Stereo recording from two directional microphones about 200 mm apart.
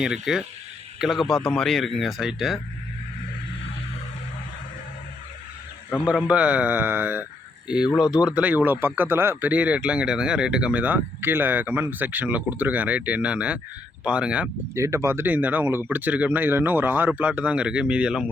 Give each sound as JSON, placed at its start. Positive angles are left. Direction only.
{"t": 0.0, "sound": "speech", "side_deg": -5}
{"t": 6.1, "sound": "speech", "side_deg": -5}